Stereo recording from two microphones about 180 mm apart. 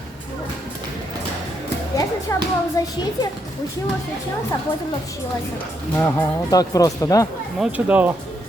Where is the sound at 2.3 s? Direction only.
15° left (ahead or behind).